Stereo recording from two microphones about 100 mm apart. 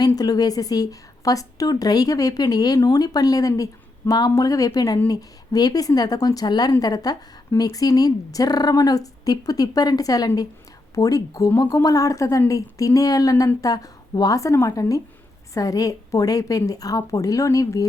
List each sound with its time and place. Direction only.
0.2 s speech: 40° left (ahead or behind)